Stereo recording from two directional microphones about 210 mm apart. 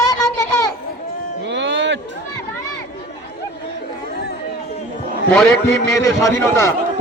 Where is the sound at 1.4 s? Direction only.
55° right (ahead or behind).